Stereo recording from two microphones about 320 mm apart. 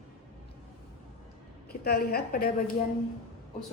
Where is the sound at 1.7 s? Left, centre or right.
Left.